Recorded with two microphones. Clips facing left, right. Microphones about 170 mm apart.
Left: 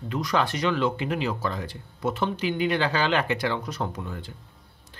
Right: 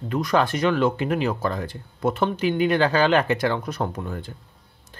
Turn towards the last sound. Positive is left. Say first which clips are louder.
# right 4 dB
turn(degrees=-50)  # may be behind; listen again after turning